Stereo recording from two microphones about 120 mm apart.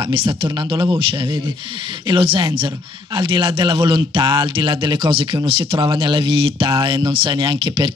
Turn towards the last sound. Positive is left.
turn(degrees=-40)  # may be behind; listen again after turning